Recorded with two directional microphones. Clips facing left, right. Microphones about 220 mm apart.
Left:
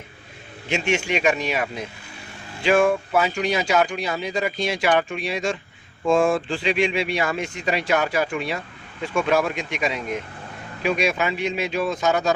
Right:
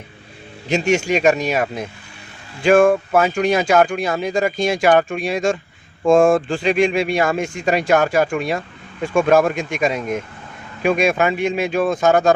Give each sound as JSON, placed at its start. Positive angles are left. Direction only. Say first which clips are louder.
{"t": 0.7, "sound": "speech", "louder": "right 6 dB", "side_deg": -40}